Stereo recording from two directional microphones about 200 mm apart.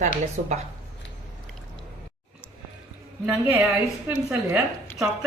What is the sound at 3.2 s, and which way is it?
A woman's voice, 10° right (ahead or behind).